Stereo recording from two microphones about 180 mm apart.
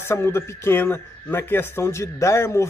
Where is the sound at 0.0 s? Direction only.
15° left (ahead or behind).